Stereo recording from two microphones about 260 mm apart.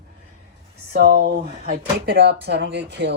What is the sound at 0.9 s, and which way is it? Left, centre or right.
Speech, right.